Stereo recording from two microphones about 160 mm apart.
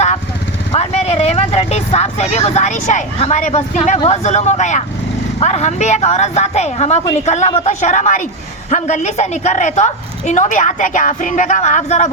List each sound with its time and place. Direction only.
0.7 s a woman's voice: 40° left (ahead or behind)